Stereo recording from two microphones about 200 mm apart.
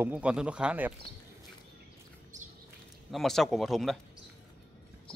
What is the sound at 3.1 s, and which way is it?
Speech, centre (ahead or behind).